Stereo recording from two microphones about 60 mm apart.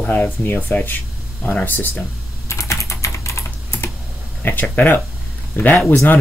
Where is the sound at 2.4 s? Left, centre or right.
Left.